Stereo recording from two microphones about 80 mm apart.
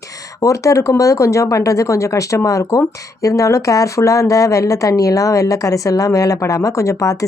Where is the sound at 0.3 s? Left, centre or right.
Left.